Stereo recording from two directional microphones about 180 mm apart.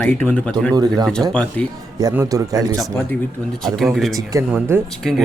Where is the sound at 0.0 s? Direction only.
10° left (ahead or behind).